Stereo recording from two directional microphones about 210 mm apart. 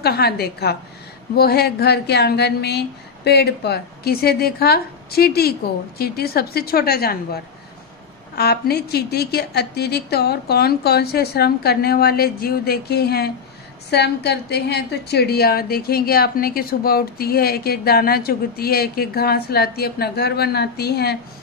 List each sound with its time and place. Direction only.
0.0 s a woman's voice: 50° left (ahead or behind)
8.4 s a woman's voice: 50° left (ahead or behind)